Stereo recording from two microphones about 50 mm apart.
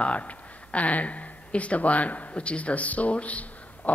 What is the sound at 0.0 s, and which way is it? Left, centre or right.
Speech, left.